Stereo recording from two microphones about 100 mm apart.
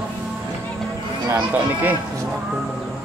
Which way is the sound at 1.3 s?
20° right (ahead or behind).